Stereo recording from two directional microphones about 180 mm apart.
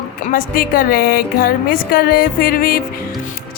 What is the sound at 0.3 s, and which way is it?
Speech, 55° left (ahead or behind).